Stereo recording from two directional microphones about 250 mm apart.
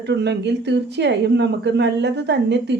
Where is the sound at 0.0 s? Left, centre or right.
Right.